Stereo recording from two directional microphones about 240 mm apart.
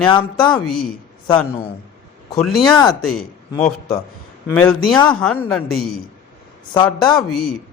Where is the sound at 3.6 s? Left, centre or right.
Left.